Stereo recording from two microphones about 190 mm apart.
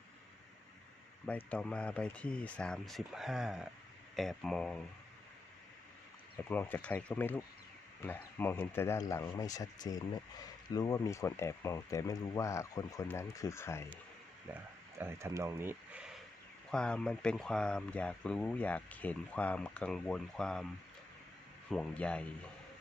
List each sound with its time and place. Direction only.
1.5 s speech: 5° left (ahead or behind)
6.5 s speech: 10° left (ahead or behind)
14.9 s speech: 15° right (ahead or behind); by 20.7 s 5° left (ahead or behind)
21.7 s speech: 5° left (ahead or behind)